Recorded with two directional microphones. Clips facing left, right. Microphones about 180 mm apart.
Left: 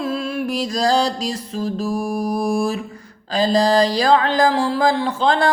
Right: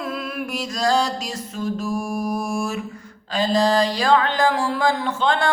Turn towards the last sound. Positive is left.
turn(degrees=35)  # may be behind; listen again after turning